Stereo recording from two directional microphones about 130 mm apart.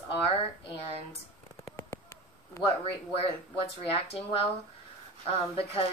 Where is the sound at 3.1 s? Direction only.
45° left (ahead or behind).